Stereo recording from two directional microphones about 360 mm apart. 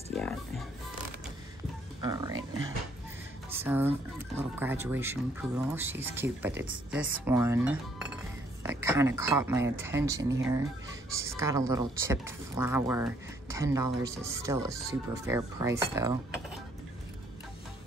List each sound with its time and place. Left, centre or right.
0.1 s speech: centre
2.0 s speech: centre
3.4 s speech: centre